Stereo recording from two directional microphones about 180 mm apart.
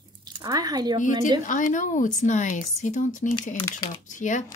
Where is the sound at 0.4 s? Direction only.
20° right (ahead or behind).